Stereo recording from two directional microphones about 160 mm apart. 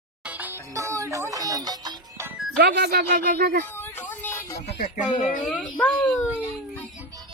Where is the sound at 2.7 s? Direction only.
85° right; by 3.6 s 65° right (ahead or behind).